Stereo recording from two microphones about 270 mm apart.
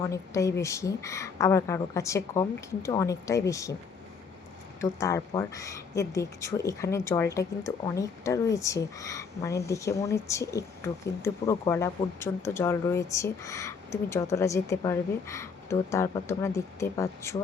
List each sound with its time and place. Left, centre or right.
0.0 s speech: centre
4.8 s speech: centre